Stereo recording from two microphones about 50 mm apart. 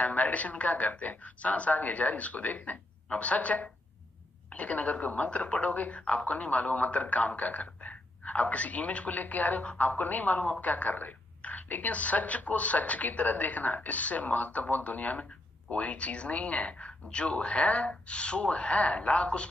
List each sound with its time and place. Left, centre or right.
0.0 s a woman's voice: left